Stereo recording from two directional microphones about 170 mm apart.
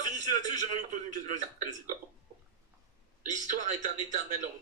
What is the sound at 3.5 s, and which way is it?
Speech, 45° right (ahead or behind).